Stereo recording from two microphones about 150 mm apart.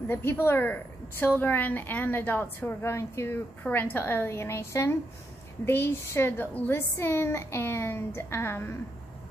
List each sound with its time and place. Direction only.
0.1 s a woman's voice: 15° left (ahead or behind)